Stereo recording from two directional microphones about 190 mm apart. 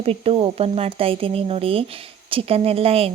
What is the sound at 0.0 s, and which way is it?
Speech, 30° right (ahead or behind).